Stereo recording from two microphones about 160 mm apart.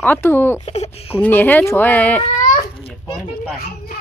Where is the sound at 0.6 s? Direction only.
40° left (ahead or behind).